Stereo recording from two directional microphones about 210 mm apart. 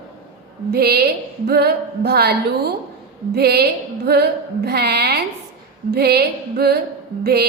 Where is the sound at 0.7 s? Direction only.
50° right (ahead or behind).